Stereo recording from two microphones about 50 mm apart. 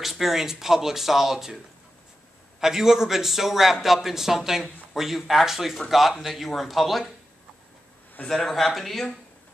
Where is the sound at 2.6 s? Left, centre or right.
Centre.